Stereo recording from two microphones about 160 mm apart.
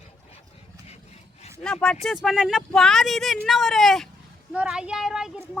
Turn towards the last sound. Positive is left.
turn(degrees=-5)  # may be behind; listen again after turning